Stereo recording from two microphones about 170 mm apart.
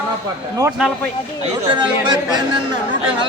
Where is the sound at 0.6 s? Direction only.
20° right (ahead or behind).